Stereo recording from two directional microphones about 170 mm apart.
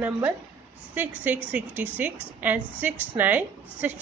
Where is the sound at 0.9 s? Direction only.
10° right (ahead or behind).